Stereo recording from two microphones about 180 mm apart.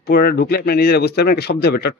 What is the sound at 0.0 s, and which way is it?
Speech, 55° left (ahead or behind).